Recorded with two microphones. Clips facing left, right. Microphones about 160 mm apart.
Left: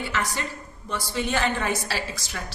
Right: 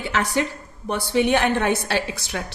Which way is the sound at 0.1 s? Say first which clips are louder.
Right 11 dB; 70° right (ahead or behind).